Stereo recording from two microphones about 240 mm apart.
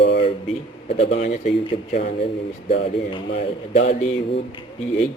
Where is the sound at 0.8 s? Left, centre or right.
Left.